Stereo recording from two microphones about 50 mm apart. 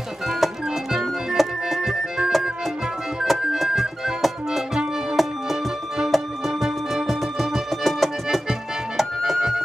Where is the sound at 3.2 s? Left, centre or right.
Centre.